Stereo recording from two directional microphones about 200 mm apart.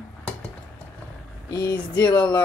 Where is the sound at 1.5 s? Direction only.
20° left (ahead or behind).